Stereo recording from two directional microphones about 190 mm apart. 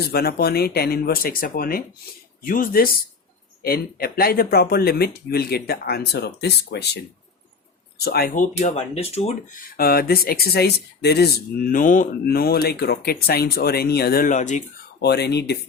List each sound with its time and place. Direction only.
0.0 s speech: 55° left (ahead or behind)
8.5 s speech: 35° left (ahead or behind)
9.7 s speech: 55° left (ahead or behind)
14.9 s speech: 60° left (ahead or behind)